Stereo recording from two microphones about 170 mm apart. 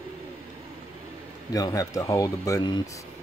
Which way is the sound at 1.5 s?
20° left (ahead or behind).